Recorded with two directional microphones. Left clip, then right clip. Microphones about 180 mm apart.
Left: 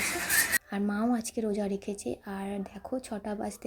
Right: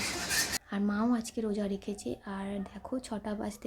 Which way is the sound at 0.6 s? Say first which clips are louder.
Left 1 dB; 15° left (ahead or behind).